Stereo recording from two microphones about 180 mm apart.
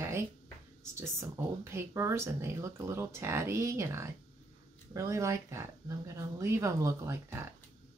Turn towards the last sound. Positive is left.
turn(degrees=-15)  # may be behind; listen again after turning